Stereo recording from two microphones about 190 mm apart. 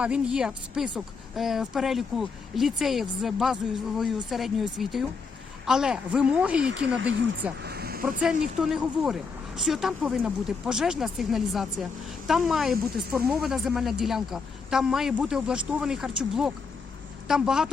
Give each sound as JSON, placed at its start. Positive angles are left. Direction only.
{"t": 0.0, "sound": "a woman's voice", "side_deg": -5}
{"t": 6.7, "sound": "speech", "side_deg": -80}
{"t": 7.6, "sound": "speech", "side_deg": -55}
{"t": 8.2, "sound": "a woman's voice", "side_deg": -5}